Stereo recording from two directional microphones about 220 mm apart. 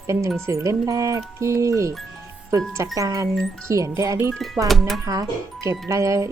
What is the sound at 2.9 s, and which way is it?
Speech, 15° right (ahead or behind).